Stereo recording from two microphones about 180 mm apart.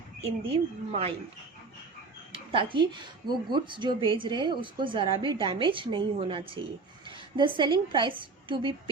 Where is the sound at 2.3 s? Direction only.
30° right (ahead or behind).